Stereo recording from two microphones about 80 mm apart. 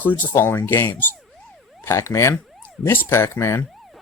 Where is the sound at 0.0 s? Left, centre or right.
Left.